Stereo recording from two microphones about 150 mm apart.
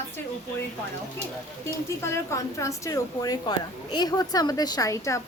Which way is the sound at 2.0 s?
20° left (ahead or behind).